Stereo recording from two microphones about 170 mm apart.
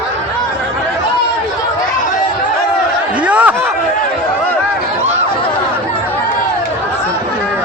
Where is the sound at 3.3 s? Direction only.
10° right (ahead or behind).